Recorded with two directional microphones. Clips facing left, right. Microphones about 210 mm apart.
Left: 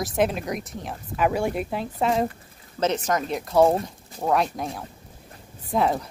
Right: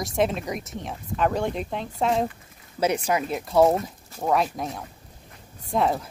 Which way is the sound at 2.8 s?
10° right (ahead or behind).